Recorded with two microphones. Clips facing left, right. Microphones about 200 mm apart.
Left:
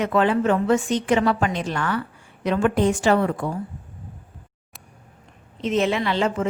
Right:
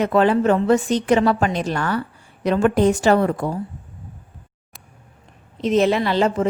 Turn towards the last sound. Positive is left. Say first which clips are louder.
# right 4 dB
turn(degrees=-40)  # may be behind; listen again after turning